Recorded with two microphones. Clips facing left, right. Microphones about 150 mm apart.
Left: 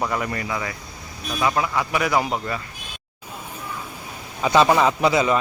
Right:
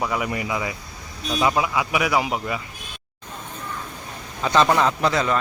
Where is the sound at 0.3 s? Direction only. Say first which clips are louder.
Right 1 dB; 15° right (ahead or behind).